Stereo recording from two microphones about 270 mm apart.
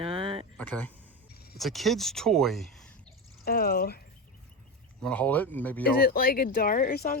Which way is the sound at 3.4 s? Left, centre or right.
Left.